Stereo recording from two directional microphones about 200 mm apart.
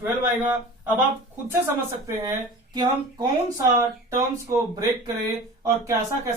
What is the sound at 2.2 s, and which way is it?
Speech, 20° right (ahead or behind).